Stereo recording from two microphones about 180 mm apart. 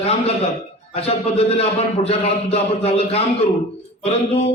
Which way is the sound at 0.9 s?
35° left (ahead or behind).